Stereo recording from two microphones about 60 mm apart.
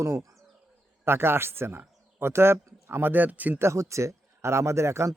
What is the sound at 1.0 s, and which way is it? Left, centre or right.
Speech, right.